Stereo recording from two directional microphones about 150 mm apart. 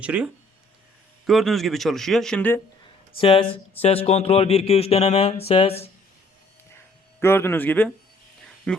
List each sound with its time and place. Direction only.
0.0 s speech: 10° right (ahead or behind)
1.3 s speech: centre (ahead or behind)
3.2 s speech: 40° left (ahead or behind)
7.2 s speech: 15° left (ahead or behind)